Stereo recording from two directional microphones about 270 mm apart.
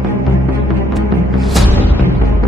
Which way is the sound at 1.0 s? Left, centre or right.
Centre.